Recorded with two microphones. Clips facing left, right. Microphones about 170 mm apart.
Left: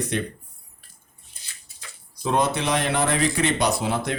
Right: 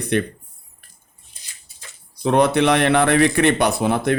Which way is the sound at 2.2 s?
65° right (ahead or behind).